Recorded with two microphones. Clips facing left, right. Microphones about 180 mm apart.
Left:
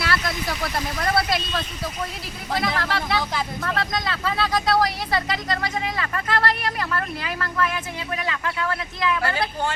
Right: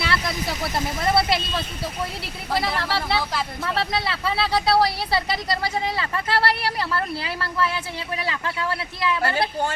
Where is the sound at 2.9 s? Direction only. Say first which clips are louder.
Even; 30° right (ahead or behind).